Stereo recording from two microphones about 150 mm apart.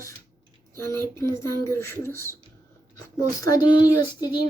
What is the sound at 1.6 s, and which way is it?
Speech, 20° left (ahead or behind).